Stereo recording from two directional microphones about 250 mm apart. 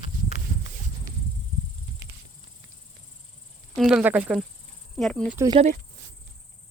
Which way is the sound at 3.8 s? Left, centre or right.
Centre.